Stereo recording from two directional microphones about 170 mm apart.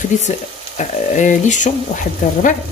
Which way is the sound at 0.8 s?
45° left (ahead or behind).